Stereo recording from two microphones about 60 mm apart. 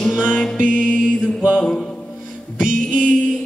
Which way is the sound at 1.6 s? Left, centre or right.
Centre.